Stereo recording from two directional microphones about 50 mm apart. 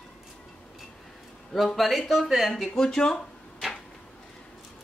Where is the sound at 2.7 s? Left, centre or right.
Centre.